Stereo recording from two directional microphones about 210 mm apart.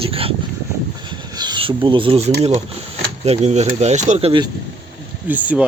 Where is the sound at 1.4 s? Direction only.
20° right (ahead or behind).